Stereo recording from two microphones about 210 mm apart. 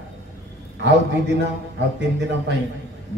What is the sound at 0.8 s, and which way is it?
Speech, 55° right (ahead or behind).